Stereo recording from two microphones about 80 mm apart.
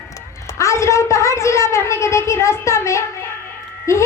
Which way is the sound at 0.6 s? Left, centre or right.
Left.